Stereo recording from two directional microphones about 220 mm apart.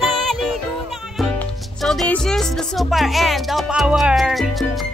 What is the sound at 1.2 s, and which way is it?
Music, centre (ahead or behind).